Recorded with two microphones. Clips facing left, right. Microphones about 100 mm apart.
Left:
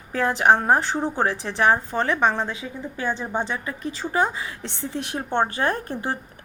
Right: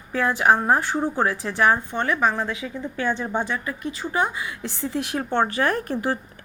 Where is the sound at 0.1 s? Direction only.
35° left (ahead or behind); by 3.6 s 20° left (ahead or behind).